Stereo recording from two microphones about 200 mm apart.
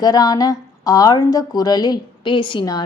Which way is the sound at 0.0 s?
20° left (ahead or behind).